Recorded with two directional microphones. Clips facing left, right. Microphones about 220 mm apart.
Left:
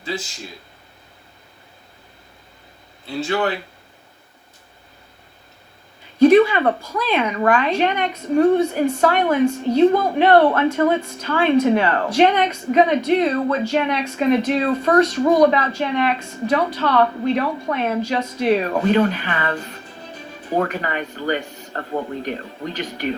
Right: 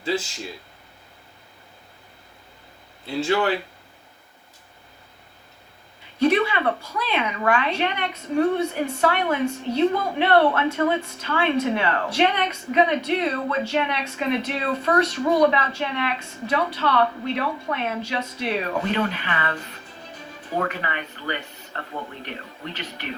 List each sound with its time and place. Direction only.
6.1 s a woman's voice: 45° left (ahead or behind)
20.6 s a woman's voice: 40° left (ahead or behind)